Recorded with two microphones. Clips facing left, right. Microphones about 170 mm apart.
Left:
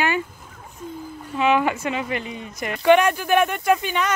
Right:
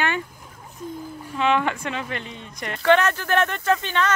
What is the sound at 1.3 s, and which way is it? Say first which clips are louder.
Speech: left 2 dB; 10° left (ahead or behind).